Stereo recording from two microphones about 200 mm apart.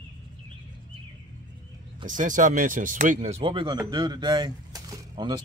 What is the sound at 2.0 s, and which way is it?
Speech, 40° right (ahead or behind).